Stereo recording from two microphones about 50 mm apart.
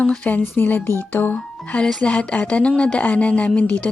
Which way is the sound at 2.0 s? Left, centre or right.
Left.